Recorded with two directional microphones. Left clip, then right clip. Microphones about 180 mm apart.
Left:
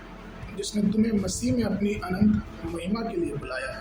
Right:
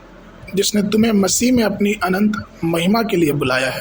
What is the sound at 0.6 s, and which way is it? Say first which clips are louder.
Speech: right 11 dB; 45° right (ahead or behind).